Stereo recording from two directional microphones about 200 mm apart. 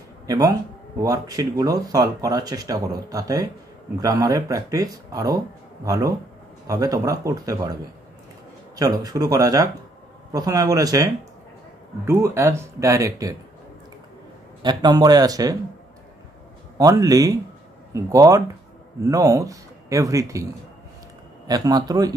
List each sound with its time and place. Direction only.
0.3 s speech: 15° right (ahead or behind)
8.7 s speech: 15° right (ahead or behind)
14.6 s speech: 20° right (ahead or behind)
16.7 s speech: 15° right (ahead or behind)
21.5 s speech: 20° right (ahead or behind)